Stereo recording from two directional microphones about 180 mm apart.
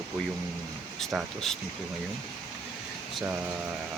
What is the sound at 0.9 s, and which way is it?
Speech, centre (ahead or behind).